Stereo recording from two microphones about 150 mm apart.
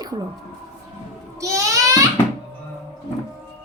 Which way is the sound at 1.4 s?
25° right (ahead or behind).